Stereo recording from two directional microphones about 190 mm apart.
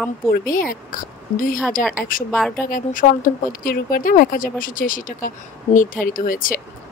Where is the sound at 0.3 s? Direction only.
50° left (ahead or behind).